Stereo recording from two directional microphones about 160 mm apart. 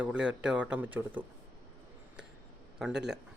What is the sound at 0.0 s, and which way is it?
Speech, 5° right (ahead or behind).